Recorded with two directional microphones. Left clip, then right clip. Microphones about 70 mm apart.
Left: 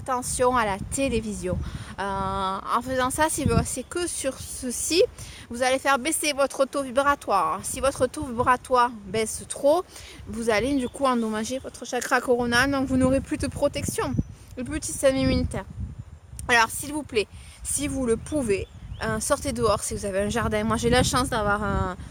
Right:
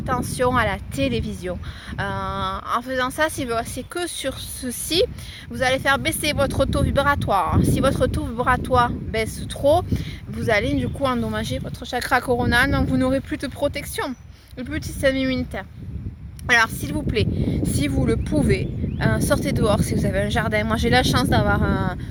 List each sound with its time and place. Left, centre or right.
0.0 s a woman's voice: left
5.5 s a woman's voice: left
9.9 s speech: left
11.2 s a woman's voice: left
16.5 s a woman's voice: left